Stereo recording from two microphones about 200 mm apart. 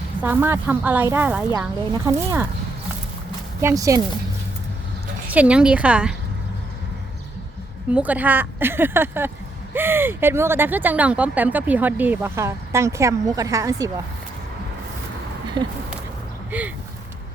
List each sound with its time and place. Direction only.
0.2 s speech: 10° right (ahead or behind)
3.6 s speech: 15° right (ahead or behind)
5.3 s a woman's voice: 5° right (ahead or behind)
7.9 s speech: 5° right (ahead or behind)
15.6 s speech: 20° right (ahead or behind)
16.5 s a sound: 5° right (ahead or behind)